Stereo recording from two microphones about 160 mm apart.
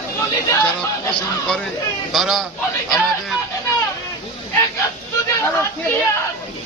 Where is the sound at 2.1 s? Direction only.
Centre (ahead or behind).